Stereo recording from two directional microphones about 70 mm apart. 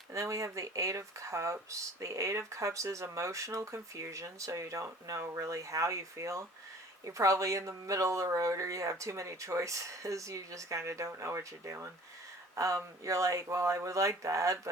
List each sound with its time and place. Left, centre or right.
0.1 s speech: right